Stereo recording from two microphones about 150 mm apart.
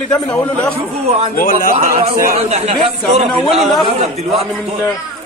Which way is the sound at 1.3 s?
70° left (ahead or behind).